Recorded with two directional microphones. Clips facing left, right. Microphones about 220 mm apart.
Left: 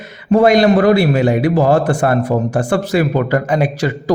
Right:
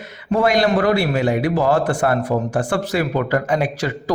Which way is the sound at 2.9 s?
20° left (ahead or behind).